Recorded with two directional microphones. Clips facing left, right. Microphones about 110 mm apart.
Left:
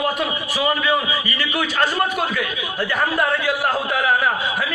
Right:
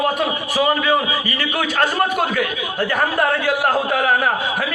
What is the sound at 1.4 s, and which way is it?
A man's voice, 50° right (ahead or behind).